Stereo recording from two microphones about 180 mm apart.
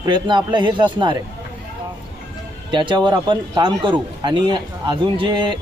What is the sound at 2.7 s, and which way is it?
Speech, 25° right (ahead or behind).